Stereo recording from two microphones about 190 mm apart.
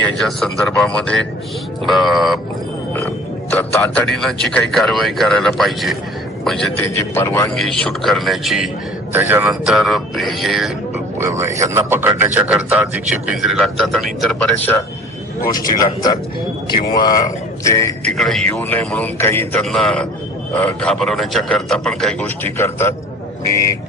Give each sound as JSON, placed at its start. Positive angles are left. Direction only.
{"t": 0.2, "sound": "speech", "side_deg": 0}
{"t": 3.5, "sound": "a man's voice", "side_deg": 10}
{"t": 6.8, "sound": "a man's voice", "side_deg": 10}
{"t": 7.5, "sound": "speech", "side_deg": 5}
{"t": 11.2, "sound": "a man's voice", "side_deg": -15}
{"t": 15.4, "sound": "a man's voice", "side_deg": 20}
{"t": 18.2, "sound": "a man's voice", "side_deg": 0}